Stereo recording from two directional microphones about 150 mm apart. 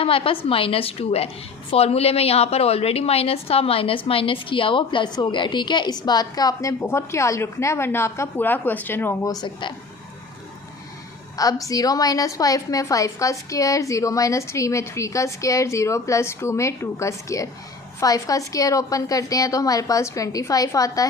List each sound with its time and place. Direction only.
0.0 s a woman's voice: 35° left (ahead or behind); by 9.3 s 15° left (ahead or behind)
9.3 s a woman's voice: 30° left (ahead or behind)
11.3 s a woman's voice: 25° left (ahead or behind)